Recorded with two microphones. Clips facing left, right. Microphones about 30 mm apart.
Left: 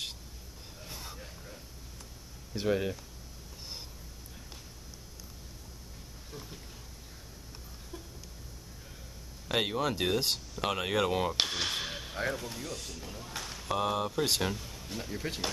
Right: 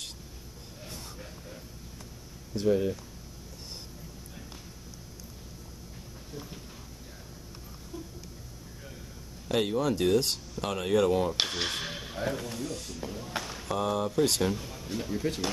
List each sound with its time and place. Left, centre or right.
0.8 s a sound: centre
2.5 s speech: left
9.5 s speech: centre
10.6 s speech: centre
11.3 s speech: centre
13.4 s a sound: centre
13.7 s speech: centre
14.5 s speech: centre